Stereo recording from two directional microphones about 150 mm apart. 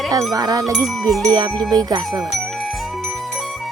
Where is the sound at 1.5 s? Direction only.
Centre (ahead or behind).